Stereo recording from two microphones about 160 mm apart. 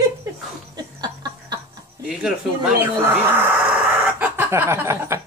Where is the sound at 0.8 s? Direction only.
25° right (ahead or behind).